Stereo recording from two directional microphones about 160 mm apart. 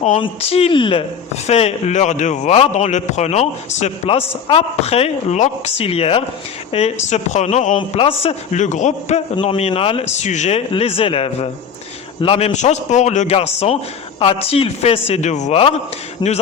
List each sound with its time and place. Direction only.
0.2 s a man's voice: 35° left (ahead or behind)
7.8 s a man's voice: 35° left (ahead or behind)
9.3 s a man's voice: 30° left (ahead or behind)
16.2 s speech: 30° left (ahead or behind)